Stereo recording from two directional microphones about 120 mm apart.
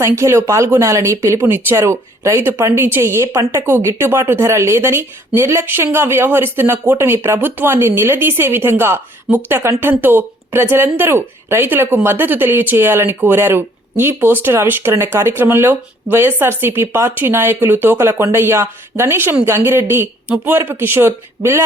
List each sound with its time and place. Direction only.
0.0 s speech: 25° right (ahead or behind)